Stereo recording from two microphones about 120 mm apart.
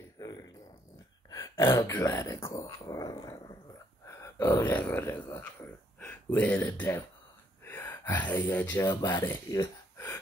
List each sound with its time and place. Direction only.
0.2 s a sound: 30° left (ahead or behind)
1.5 s speech: 25° left (ahead or behind)
8.8 s speech: 35° left (ahead or behind)
9.5 s gasp: 25° left (ahead or behind)